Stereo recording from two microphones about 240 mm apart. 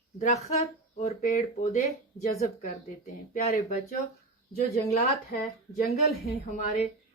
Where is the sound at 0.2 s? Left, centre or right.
Left.